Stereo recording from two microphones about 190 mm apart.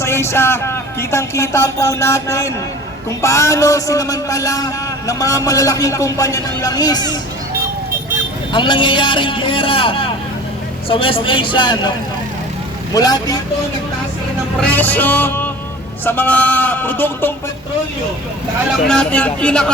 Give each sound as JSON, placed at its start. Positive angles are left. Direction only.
{"t": 0.0, "sound": "a man's voice", "side_deg": 15}
{"t": 8.5, "sound": "a man's voice", "side_deg": 25}
{"t": 12.9, "sound": "a man's voice", "side_deg": 20}
{"t": 14.6, "sound": "a man's voice", "side_deg": 10}
{"t": 18.9, "sound": "speech", "side_deg": 5}